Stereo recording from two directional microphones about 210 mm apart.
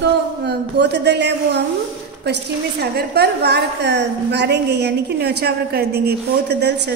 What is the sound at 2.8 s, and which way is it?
A woman's voice, 50° right (ahead or behind).